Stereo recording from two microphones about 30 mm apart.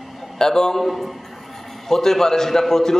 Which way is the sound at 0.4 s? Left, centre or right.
Left.